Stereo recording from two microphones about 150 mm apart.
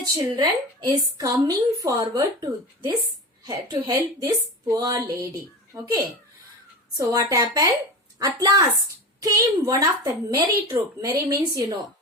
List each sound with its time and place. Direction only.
0.0 s a woman's voice: 25° right (ahead or behind)